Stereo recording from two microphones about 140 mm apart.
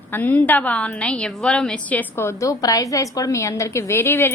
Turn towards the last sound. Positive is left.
turn(degrees=15)  # may be behind; listen again after turning